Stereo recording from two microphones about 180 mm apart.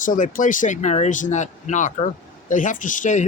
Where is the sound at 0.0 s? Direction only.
50° left (ahead or behind).